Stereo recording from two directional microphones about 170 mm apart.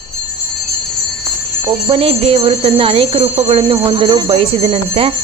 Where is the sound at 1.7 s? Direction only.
30° right (ahead or behind).